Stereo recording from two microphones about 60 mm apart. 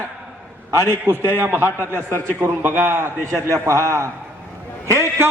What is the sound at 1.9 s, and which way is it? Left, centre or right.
Speech, left.